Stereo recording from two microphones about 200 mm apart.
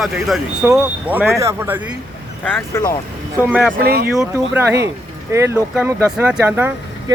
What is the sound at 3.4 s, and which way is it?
Speech, 5° right (ahead or behind).